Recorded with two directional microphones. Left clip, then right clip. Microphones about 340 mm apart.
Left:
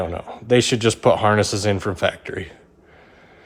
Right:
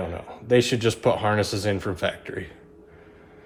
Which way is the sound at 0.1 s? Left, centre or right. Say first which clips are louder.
Right 1 dB; left.